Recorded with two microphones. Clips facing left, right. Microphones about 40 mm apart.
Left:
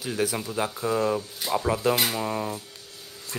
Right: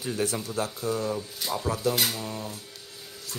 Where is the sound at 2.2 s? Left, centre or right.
Left.